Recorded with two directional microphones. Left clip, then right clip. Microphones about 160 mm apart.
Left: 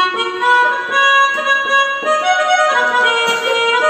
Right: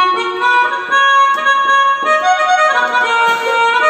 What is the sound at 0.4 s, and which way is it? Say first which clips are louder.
Music: left 2 dB; 30° right (ahead or behind).